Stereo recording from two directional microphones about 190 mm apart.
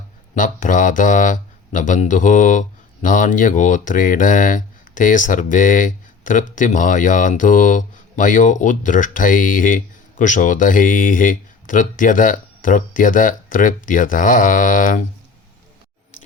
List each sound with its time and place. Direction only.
0.3 s speech: 45° left (ahead or behind)